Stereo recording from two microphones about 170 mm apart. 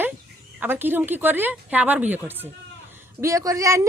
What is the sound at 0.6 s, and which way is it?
A woman's voice, 10° right (ahead or behind).